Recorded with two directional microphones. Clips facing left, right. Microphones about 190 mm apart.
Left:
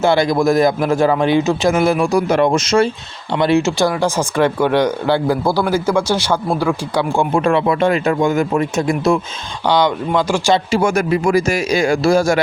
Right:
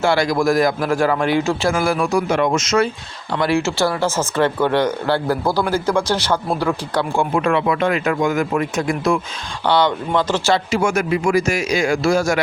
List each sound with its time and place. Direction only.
0.0 s a man's voice: 20° left (ahead or behind)
2.1 s speech: 35° left (ahead or behind); by 7.3 s 10° left (ahead or behind)
7.3 s a man's voice: 30° left (ahead or behind)
9.6 s speech: 15° left (ahead or behind)
10.7 s speech: 35° left (ahead or behind)